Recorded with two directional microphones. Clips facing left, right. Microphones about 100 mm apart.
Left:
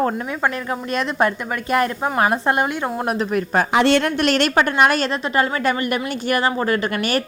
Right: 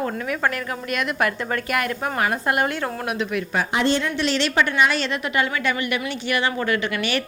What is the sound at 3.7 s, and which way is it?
Speech, 70° left (ahead or behind).